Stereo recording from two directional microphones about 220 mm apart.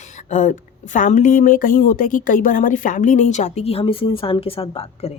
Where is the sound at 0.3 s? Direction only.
35° left (ahead or behind).